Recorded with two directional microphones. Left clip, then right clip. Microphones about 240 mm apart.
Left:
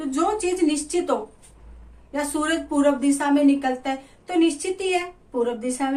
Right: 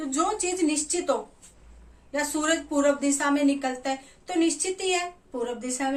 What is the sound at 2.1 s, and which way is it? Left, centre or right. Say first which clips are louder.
A woman's voice: left 2 dB; centre.